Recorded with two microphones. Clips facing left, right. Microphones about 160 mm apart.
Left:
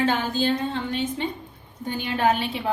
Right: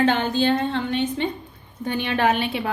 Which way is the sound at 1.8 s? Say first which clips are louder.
Right 1 dB; 75° right (ahead or behind).